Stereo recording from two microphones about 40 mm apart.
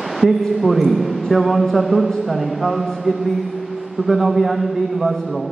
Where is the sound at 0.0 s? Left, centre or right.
Centre.